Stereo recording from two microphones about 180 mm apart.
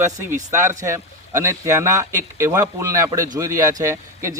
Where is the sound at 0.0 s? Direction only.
15° right (ahead or behind).